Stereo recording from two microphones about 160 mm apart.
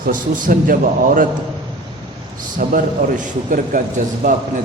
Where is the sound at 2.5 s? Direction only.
55° right (ahead or behind).